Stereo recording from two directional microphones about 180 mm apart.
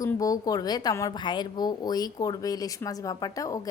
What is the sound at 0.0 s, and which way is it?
A woman's voice, 20° left (ahead or behind).